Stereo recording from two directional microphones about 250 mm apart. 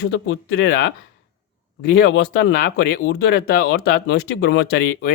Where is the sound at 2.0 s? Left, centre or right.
Left.